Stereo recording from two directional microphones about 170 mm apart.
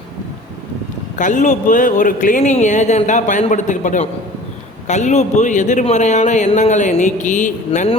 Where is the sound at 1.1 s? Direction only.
45° left (ahead or behind).